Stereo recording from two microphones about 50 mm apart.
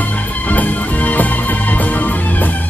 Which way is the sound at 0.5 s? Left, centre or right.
Left.